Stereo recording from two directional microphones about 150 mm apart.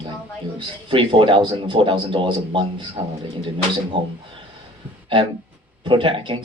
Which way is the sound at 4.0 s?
35° right (ahead or behind).